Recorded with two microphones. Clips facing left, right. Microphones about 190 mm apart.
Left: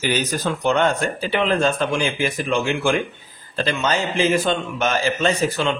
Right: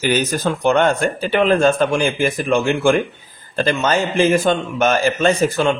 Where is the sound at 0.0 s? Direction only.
50° right (ahead or behind).